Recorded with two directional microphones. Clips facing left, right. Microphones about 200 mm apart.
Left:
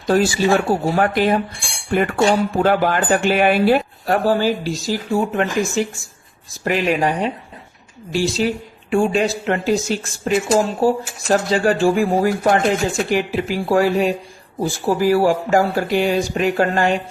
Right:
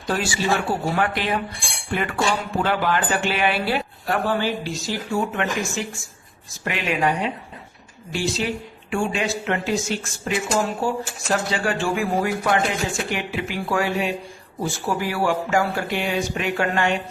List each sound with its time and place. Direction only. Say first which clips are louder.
0.1 s speech: left 7 dB; 40° left (ahead or behind)